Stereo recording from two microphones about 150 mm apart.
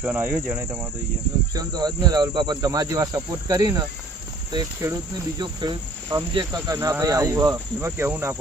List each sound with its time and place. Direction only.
0.0 s cricket: 10° right (ahead or behind)
1.5 s speech: 25° right (ahead or behind)
7.5 s cricket: 15° right (ahead or behind)